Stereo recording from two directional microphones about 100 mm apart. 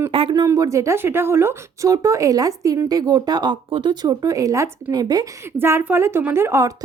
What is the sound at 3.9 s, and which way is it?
Speech, 40° right (ahead or behind).